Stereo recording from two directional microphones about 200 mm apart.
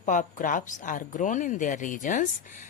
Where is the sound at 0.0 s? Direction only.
40° left (ahead or behind).